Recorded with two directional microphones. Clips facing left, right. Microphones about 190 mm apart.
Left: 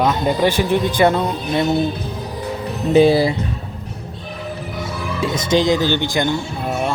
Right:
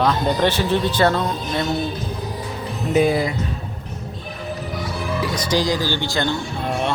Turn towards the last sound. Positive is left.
turn(degrees=5)  # may be behind; listen again after turning